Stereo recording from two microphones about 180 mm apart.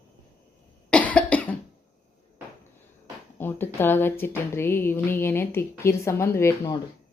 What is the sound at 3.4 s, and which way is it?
A woman's voice, 10° left (ahead or behind).